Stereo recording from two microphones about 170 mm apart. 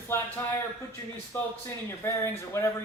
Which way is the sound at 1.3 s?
15° left (ahead or behind).